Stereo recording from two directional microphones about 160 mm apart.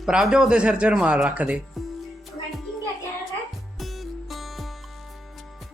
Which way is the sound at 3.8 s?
Centre (ahead or behind).